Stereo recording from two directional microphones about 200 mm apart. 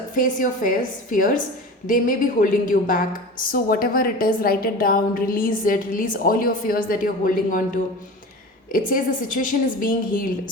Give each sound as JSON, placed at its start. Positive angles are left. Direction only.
{"t": 0.1, "sound": "a woman's voice", "side_deg": 40}
{"t": 8.7, "sound": "a woman's voice", "side_deg": 45}